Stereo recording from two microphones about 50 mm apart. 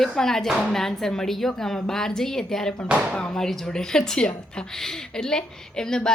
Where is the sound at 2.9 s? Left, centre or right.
Right.